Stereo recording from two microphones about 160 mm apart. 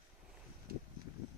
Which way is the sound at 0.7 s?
75° right (ahead or behind).